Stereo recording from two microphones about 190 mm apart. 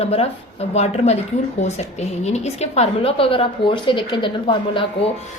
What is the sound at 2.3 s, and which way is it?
A woman's voice, 35° left (ahead or behind).